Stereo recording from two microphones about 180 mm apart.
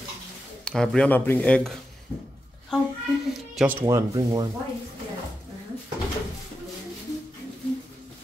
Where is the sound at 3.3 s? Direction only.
Centre (ahead or behind).